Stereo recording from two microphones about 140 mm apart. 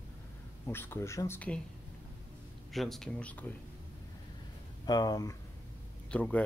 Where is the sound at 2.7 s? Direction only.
Centre (ahead or behind).